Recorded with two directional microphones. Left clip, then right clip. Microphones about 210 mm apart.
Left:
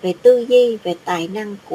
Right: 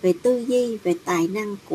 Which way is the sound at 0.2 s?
25° right (ahead or behind).